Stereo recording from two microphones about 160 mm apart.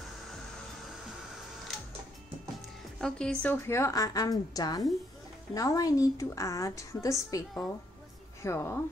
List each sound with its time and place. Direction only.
3.0 s a woman's voice: 5° left (ahead or behind)